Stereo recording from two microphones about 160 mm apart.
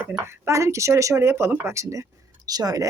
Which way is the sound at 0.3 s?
20° right (ahead or behind).